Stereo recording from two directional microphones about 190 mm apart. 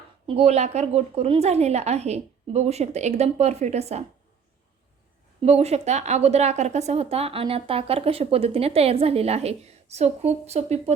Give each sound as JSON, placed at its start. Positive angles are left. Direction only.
{"t": 0.3, "sound": "a woman's voice", "side_deg": -35}
{"t": 5.4, "sound": "a woman's voice", "side_deg": -35}